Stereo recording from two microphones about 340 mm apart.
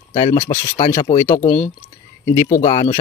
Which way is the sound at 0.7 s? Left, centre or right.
Centre.